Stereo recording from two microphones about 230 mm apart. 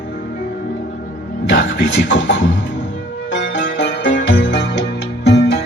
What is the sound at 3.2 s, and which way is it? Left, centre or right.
Music, left.